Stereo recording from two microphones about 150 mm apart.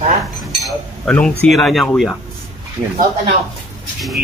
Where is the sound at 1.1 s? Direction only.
10° left (ahead or behind).